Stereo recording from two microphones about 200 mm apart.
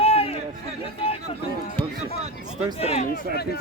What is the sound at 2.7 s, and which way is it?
Speech, 30° left (ahead or behind).